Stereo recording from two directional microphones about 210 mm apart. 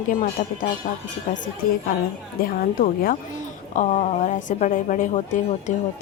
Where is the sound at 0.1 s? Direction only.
40° left (ahead or behind).